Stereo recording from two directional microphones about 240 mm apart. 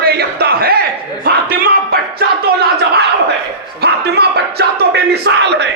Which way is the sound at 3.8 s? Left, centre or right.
Right.